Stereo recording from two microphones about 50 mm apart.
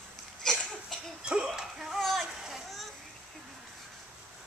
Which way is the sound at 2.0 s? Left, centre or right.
Centre.